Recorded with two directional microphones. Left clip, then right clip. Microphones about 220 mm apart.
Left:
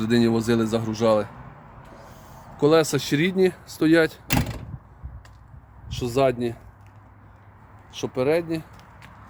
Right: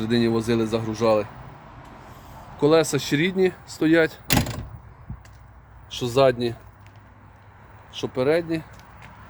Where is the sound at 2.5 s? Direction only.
15° left (ahead or behind).